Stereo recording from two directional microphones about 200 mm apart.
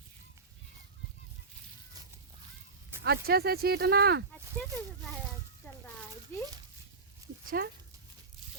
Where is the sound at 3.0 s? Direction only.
55° right (ahead or behind).